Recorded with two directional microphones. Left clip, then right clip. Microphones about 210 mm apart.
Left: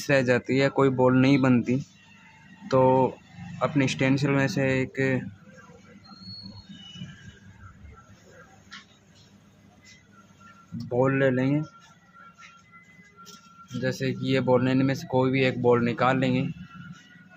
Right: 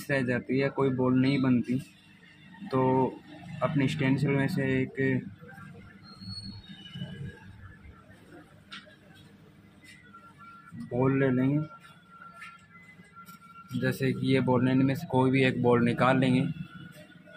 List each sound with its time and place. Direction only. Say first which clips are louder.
0.0 s speech: left 7 dB; 25° left (ahead or behind)
2.7 s speech: left 6 dB; 20° left (ahead or behind)
11.0 s speech: left 4 dB; 15° left (ahead or behind)
13.7 s speech: left 1 dB; 5° left (ahead or behind)